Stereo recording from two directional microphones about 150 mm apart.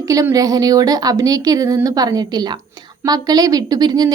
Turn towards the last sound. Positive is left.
turn(degrees=-25)  # may be behind; listen again after turning